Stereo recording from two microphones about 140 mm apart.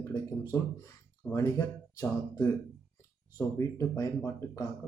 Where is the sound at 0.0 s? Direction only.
25° left (ahead or behind).